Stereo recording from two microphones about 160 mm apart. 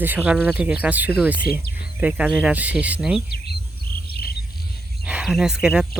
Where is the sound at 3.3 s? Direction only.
90° left.